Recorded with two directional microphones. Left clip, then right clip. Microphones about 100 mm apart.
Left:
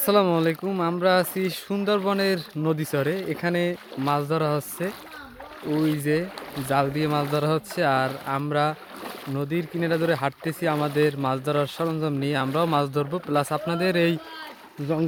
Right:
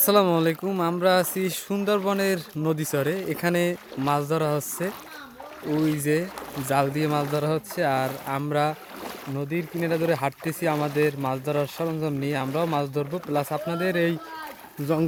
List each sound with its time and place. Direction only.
0.0 s speech: centre (ahead or behind)
3.9 s speech: 5° left (ahead or behind)
7.3 s speech: 25° left (ahead or behind)
8.3 s speech: 5° left (ahead or behind)
9.3 s speech: 40° left (ahead or behind)
9.6 s speech: 20° left (ahead or behind)
11.3 s speech: 30° left (ahead or behind)